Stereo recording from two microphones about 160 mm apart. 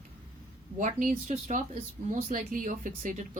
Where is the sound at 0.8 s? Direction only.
55° right (ahead or behind).